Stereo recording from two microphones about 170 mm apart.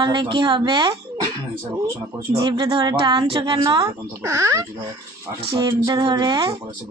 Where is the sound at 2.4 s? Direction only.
25° right (ahead or behind).